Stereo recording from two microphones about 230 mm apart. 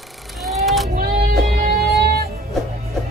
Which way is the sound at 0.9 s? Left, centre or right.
Right.